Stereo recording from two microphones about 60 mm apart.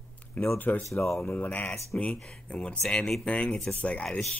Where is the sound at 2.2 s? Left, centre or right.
Centre.